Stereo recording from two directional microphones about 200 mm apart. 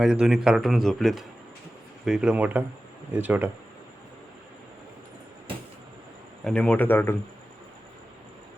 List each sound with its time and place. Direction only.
0.0 s speech: 5° right (ahead or behind)
6.4 s a man's voice: 5° left (ahead or behind)